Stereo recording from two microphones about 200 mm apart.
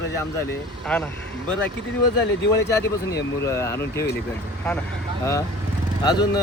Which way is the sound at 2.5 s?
15° left (ahead or behind).